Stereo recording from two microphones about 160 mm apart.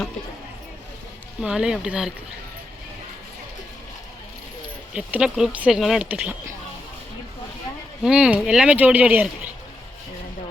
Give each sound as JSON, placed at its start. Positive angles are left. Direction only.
{"t": 1.4, "sound": "speech", "side_deg": -5}
{"t": 4.9, "sound": "speech", "side_deg": -5}
{"t": 8.0, "sound": "speech", "side_deg": -5}